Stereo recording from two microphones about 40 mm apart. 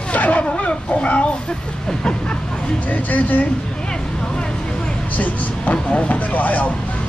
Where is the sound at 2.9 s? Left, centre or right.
Left.